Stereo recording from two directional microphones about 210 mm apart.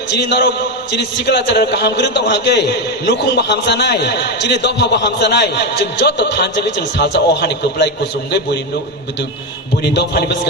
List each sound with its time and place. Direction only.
0.1 s a man's voice: 55° left (ahead or behind)
9.8 s a man's voice: 50° left (ahead or behind)